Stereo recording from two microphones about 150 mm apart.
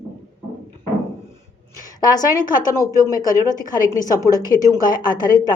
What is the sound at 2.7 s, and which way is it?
Speech, 20° left (ahead or behind).